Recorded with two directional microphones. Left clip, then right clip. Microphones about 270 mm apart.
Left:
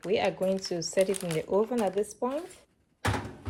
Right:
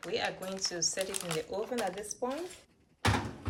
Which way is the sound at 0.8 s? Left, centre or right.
Centre.